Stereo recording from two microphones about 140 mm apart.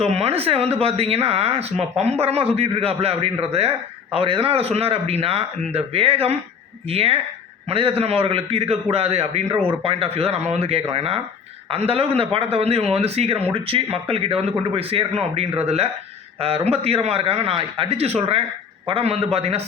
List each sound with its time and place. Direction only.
0.0 s a man's voice: 45° right (ahead or behind)